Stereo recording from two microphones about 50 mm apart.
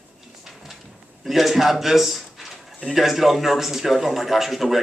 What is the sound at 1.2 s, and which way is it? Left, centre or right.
A man's voice, centre.